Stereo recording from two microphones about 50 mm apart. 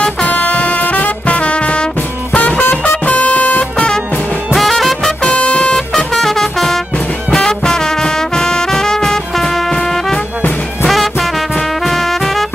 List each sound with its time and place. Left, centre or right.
0.3 s music: left
2.6 s music: left
3.1 s music: left
4.6 s music: centre
5.2 s music: left; by 12.4 s centre